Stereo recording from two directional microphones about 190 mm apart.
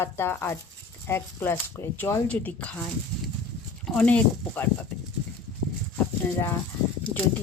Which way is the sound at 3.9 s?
5° left (ahead or behind).